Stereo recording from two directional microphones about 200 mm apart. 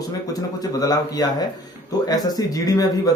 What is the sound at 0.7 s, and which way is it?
Speech, 20° left (ahead or behind).